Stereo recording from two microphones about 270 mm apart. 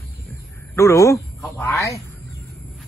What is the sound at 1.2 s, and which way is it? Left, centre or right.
Speech, centre.